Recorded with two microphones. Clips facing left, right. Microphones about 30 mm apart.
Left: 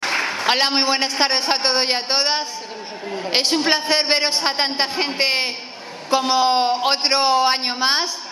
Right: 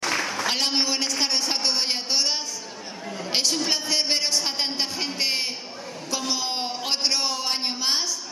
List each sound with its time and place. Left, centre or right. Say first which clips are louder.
0.0 s a man's voice: left 5 dB; left